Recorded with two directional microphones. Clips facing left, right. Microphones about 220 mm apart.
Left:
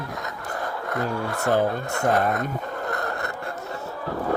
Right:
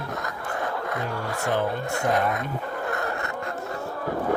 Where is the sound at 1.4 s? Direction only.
40° left (ahead or behind).